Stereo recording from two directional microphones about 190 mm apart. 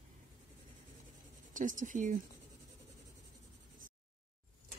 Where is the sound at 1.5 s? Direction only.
45° right (ahead or behind).